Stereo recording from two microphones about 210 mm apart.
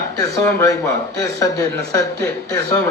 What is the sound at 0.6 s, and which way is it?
A man's voice, 15° left (ahead or behind).